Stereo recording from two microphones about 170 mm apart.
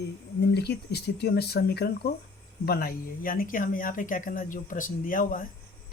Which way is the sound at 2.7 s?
60° left (ahead or behind).